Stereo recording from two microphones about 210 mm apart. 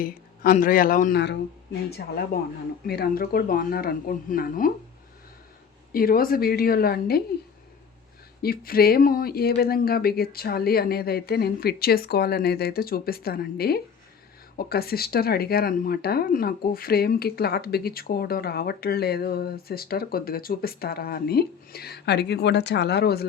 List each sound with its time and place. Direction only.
0.0 s speech: 40° left (ahead or behind)
2.3 s speech: 45° left (ahead or behind)
5.9 s speech: 45° left (ahead or behind)
8.4 s speech: 45° left (ahead or behind)